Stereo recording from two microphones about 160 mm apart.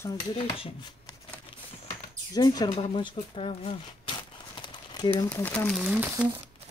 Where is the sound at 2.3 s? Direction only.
25° left (ahead or behind).